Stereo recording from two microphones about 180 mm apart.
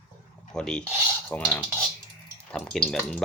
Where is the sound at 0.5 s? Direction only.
5° left (ahead or behind).